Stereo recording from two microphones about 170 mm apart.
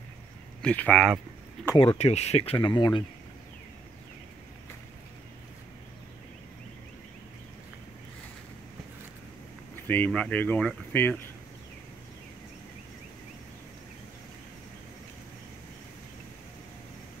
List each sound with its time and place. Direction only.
0.6 s speech: 5° left (ahead or behind)
1.8 s speech: 35° left (ahead or behind)
9.8 s speech: 10° left (ahead or behind)